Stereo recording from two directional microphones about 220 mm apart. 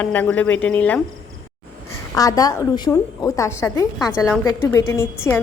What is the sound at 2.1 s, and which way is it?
A woman's voice, 15° left (ahead or behind).